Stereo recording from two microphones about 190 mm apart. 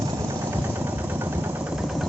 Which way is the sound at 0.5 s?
10° right (ahead or behind).